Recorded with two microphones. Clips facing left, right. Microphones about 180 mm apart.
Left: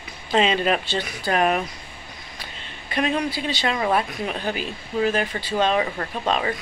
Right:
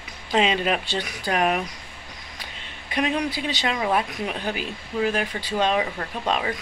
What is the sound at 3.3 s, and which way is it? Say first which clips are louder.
Speech: left 2 dB; 15° right (ahead or behind).